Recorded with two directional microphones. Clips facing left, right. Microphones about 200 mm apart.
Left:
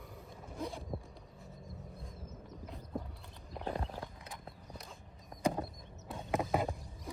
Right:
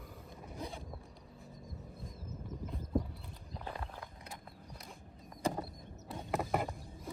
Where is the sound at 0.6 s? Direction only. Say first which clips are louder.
Left 4 dB; centre (ahead or behind).